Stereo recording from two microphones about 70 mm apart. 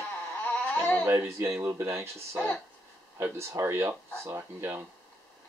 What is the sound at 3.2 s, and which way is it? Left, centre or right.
Speech, right.